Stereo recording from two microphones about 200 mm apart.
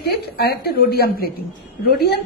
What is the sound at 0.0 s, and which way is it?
A woman's voice, 50° left (ahead or behind).